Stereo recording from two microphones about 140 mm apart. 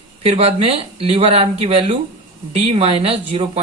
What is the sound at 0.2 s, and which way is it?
Speech, 45° right (ahead or behind).